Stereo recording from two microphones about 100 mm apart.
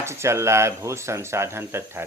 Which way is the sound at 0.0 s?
25° right (ahead or behind).